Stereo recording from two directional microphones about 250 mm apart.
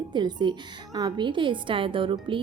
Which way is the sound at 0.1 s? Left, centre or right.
Centre.